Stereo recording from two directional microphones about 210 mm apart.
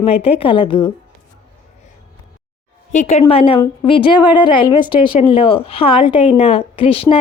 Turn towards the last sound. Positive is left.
turn(degrees=25)  # may be behind; listen again after turning